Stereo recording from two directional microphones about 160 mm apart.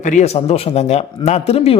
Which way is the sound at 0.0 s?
50° left (ahead or behind).